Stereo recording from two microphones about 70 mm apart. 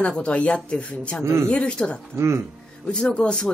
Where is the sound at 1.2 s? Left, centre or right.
Right.